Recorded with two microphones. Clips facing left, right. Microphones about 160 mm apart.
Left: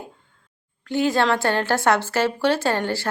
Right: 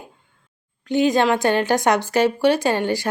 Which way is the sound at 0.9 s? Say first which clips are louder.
Right 3 dB; 20° right (ahead or behind).